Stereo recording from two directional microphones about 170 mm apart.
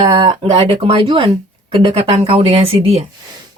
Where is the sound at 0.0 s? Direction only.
30° right (ahead or behind).